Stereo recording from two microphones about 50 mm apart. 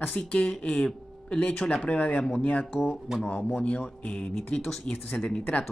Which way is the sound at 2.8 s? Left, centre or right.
Centre.